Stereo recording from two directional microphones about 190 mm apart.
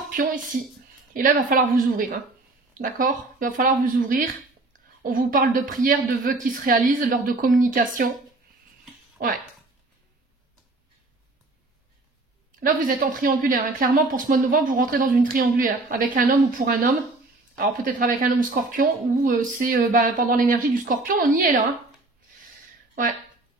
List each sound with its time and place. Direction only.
0.1 s speech: 45° right (ahead or behind)
12.5 s speech: 45° right (ahead or behind)